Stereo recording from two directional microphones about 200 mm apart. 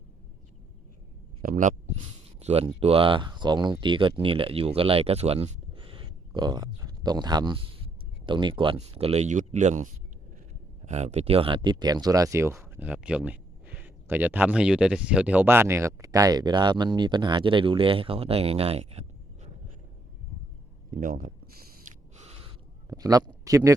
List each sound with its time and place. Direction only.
1.4 s speech: 45° right (ahead or behind)
2.4 s speech: 30° right (ahead or behind)
20.9 s a sound: 45° right (ahead or behind)
22.1 s gasp: 35° right (ahead or behind)
22.9 s speech: 20° right (ahead or behind)